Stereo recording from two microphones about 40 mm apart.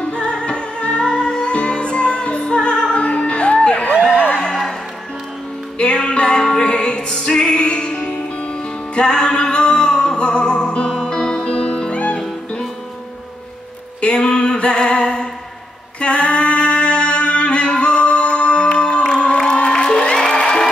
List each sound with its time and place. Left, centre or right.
0.2 s music: left
3.0 s music: left
4.5 s music: centre
5.8 s music: left
14.2 s music: left
16.0 s a sound: left
20.2 s music: centre